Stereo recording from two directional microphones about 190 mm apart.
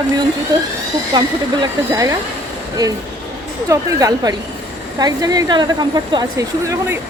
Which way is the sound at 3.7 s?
15° right (ahead or behind).